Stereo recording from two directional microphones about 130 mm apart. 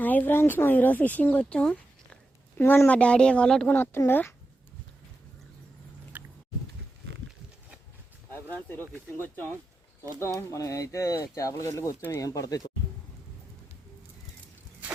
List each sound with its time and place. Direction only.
0.0 s speech: 15° left (ahead or behind)
6.1 s a sound: 15° right (ahead or behind)
9.1 s speech: 15° left (ahead or behind)